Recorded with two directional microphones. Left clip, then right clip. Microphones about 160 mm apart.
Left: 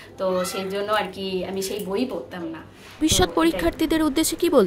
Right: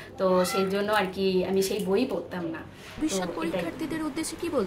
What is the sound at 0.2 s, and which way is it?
A woman's voice, 10° left (ahead or behind).